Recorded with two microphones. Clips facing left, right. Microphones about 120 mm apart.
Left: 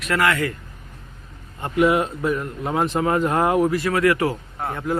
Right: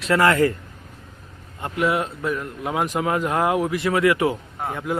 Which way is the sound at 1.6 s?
Centre (ahead or behind).